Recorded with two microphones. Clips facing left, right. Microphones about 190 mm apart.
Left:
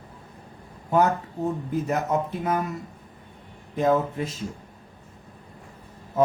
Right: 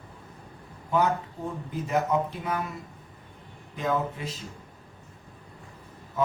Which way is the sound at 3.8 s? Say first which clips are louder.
Left 6 dB; 45° left (ahead or behind).